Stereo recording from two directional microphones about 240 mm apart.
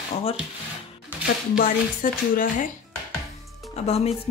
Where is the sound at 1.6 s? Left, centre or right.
Left.